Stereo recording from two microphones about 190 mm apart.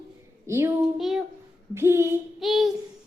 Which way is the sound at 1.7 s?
15° right (ahead or behind).